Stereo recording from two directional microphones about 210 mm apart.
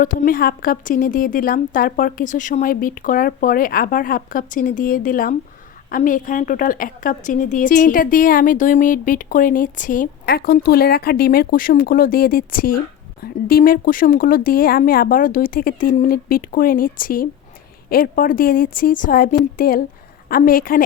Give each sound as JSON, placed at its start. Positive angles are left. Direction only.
{"t": 0.0, "sound": "a woman's voice", "side_deg": 40}